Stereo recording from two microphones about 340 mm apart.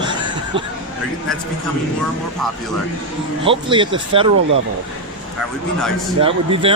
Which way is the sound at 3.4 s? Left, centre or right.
Centre.